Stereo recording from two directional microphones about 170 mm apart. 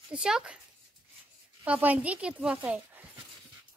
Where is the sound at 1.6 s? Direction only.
10° right (ahead or behind).